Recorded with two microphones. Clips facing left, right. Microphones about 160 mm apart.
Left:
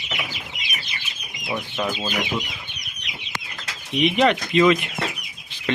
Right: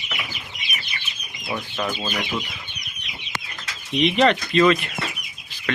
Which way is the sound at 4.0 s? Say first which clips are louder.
Even; 10° left (ahead or behind).